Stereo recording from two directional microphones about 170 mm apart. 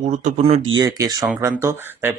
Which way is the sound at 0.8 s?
20° right (ahead or behind).